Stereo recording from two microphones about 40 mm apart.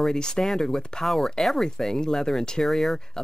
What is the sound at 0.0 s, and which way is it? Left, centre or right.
Speech, centre.